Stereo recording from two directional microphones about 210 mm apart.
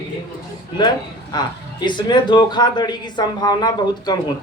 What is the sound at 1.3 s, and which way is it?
Speech, 20° left (ahead or behind).